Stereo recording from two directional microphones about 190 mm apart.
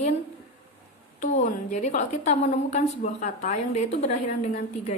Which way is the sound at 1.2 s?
40° left (ahead or behind).